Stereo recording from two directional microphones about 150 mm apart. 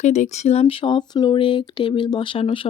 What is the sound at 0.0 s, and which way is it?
Speech, 50° left (ahead or behind).